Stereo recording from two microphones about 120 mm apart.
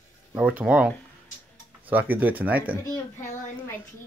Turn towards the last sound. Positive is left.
turn(degrees=25)  # may be behind; listen again after turning